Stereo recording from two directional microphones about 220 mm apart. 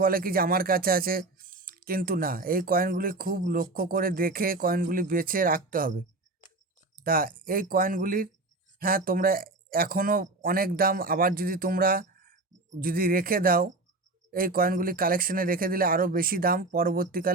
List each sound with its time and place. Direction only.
0.0 s speech: 40° right (ahead or behind)
7.0 s speech: 40° right (ahead or behind)